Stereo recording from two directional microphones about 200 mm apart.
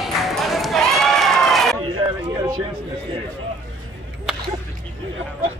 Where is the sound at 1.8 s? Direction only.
25° right (ahead or behind).